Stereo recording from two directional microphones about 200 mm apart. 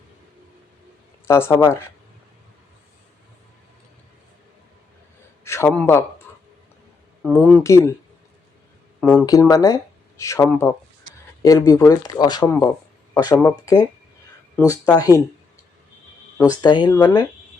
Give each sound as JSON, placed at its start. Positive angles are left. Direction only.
{"t": 1.3, "sound": "speech", "side_deg": 15}
{"t": 5.5, "sound": "a man's voice", "side_deg": 10}
{"t": 7.2, "sound": "speech", "side_deg": 0}
{"t": 9.0, "sound": "speech", "side_deg": 5}
{"t": 9.2, "sound": "speech", "side_deg": 15}
{"t": 16.4, "sound": "speech", "side_deg": 20}